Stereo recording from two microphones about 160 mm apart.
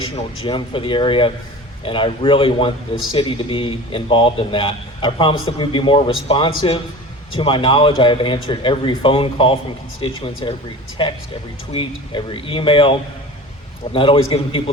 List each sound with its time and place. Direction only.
0.0 s a man's voice: 30° left (ahead or behind)